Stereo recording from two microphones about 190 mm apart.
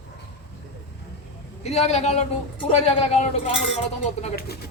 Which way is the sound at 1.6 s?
35° left (ahead or behind).